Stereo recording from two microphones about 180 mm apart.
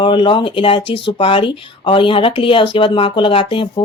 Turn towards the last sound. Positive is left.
turn(degrees=30)  # may be behind; listen again after turning